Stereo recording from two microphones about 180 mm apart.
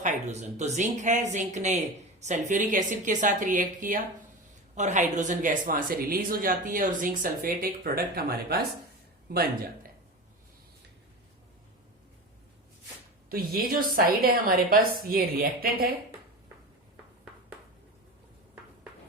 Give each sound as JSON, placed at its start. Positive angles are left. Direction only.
{"t": 0.0, "sound": "a woman's voice", "side_deg": -40}
{"t": 13.3, "sound": "a woman's voice", "side_deg": -55}